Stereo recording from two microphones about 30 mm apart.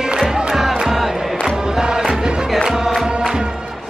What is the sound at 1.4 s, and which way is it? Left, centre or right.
Music, right.